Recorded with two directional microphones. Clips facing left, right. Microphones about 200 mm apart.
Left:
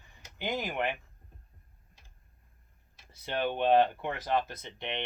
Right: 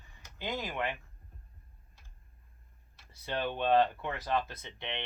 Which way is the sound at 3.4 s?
15° left (ahead or behind).